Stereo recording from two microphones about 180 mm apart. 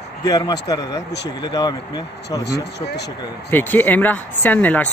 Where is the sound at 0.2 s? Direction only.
20° left (ahead or behind).